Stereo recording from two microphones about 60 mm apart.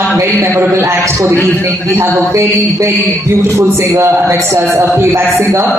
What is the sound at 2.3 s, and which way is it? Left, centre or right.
Speech, right.